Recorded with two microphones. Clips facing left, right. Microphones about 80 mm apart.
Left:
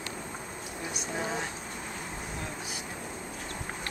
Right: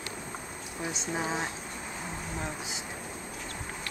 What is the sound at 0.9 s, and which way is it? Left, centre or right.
Speech, centre.